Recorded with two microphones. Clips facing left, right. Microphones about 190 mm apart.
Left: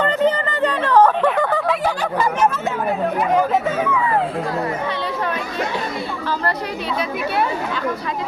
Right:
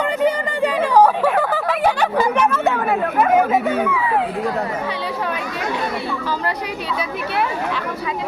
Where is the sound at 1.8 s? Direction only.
65° right (ahead or behind).